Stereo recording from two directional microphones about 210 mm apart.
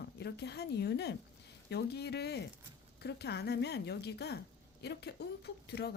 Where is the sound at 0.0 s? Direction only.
50° left (ahead or behind).